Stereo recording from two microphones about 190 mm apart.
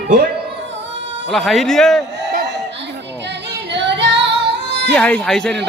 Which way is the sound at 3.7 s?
70° right (ahead or behind).